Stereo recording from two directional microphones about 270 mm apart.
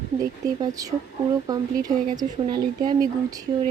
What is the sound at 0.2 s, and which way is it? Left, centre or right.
Speech, centre.